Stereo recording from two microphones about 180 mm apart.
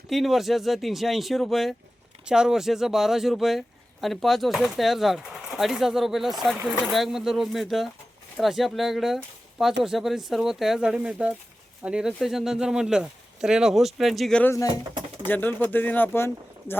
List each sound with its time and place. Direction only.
0.1 s speech: centre (ahead or behind)